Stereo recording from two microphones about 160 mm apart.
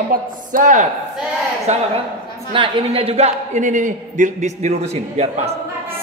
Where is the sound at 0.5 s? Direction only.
55° right (ahead or behind).